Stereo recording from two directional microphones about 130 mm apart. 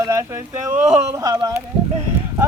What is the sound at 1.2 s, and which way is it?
Speech, 30° right (ahead or behind).